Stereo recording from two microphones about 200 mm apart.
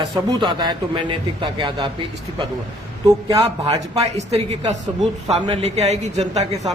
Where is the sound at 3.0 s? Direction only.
15° right (ahead or behind).